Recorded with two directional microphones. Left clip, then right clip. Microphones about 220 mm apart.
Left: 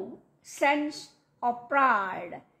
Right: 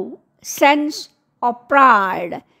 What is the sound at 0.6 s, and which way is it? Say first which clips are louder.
A woman's voice: right 11 dB; 55° right (ahead or behind).